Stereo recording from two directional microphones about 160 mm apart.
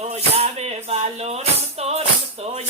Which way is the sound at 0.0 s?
40° right (ahead or behind).